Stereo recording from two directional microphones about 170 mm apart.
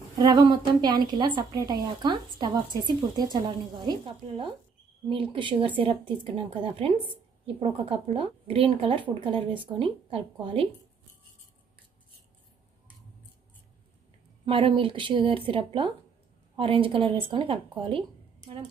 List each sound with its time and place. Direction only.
0.2 s a woman's voice: 25° right (ahead or behind)
14.4 s speech: 30° right (ahead or behind)